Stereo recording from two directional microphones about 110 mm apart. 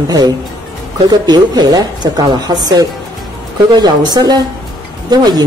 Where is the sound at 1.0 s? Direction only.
35° right (ahead or behind).